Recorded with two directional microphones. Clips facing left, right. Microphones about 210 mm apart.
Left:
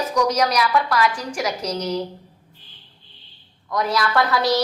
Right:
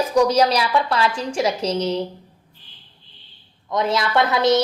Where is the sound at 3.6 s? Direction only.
25° right (ahead or behind).